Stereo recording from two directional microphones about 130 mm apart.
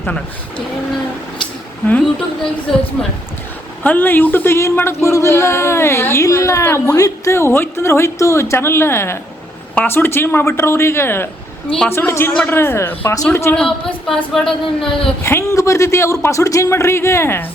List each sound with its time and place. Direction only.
1.9 s speech: 5° left (ahead or behind)
3.8 s a man's voice: 15° left (ahead or behind)
13.6 s speech: 5° left (ahead or behind)
15.2 s speech: 20° left (ahead or behind)